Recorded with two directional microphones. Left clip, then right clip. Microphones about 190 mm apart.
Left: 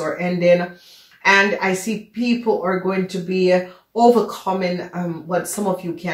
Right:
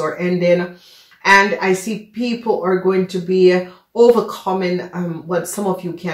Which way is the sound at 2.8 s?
40° right (ahead or behind).